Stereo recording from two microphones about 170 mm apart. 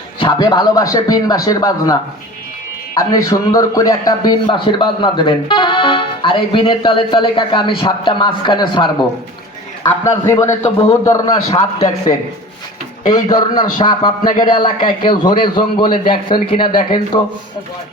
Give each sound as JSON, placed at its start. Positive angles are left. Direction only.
{"t": 0.2, "sound": "a man's voice", "side_deg": 25}